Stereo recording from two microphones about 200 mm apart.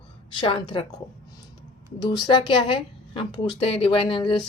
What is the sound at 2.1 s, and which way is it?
Speech, 20° left (ahead or behind).